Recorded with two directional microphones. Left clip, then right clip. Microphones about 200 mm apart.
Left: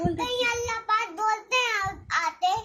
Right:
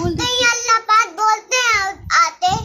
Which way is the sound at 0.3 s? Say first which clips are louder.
Right 16 dB; 15° right (ahead or behind).